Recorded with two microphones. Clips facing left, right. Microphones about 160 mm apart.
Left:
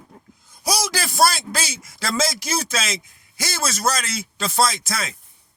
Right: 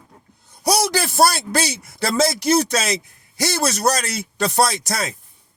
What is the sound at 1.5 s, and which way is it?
A man's voice, 65° right (ahead or behind).